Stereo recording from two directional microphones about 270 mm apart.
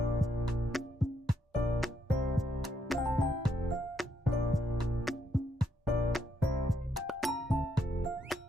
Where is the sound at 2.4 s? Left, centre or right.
Centre.